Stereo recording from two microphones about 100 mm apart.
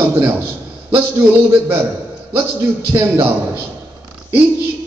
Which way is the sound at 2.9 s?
30° right (ahead or behind).